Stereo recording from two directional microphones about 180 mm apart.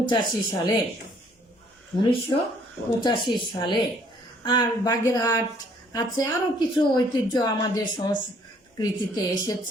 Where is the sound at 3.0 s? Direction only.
25° left (ahead or behind).